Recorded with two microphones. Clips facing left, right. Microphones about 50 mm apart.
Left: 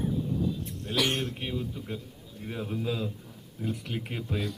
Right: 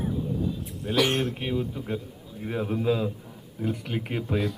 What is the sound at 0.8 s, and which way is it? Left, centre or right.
A man's voice, centre.